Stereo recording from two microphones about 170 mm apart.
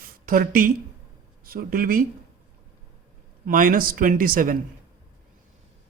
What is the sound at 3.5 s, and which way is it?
Speech, 55° right (ahead or behind).